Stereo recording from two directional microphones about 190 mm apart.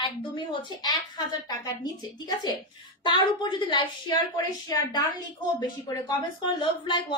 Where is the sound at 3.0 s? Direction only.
25° left (ahead or behind).